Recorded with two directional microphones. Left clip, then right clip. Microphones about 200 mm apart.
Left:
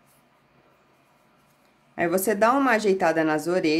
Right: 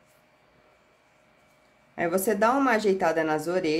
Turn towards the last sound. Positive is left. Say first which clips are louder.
# left 3 dB
turn(degrees=15)  # may be behind; listen again after turning